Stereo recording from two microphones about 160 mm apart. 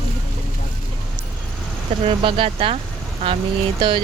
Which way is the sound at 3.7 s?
30° right (ahead or behind).